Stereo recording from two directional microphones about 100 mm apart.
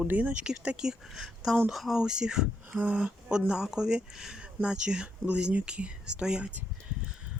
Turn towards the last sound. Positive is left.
turn(degrees=-10)  # may be behind; listen again after turning